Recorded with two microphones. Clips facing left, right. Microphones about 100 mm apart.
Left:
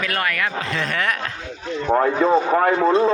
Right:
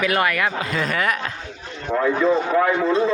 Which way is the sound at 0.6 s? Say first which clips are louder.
Right 1 dB; 5° right (ahead or behind).